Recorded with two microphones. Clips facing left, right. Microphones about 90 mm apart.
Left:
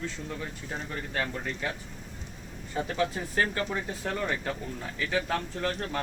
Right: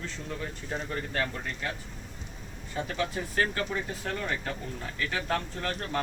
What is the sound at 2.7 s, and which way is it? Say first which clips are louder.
Speech: left 2 dB; 25° left (ahead or behind).